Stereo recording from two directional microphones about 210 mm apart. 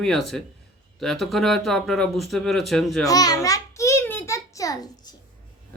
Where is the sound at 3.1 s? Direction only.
15° left (ahead or behind).